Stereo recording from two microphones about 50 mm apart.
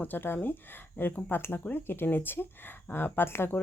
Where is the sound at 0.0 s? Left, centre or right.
Left.